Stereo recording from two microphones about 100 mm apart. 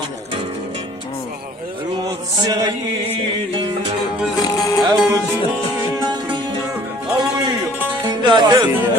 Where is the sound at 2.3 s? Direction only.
40° right (ahead or behind).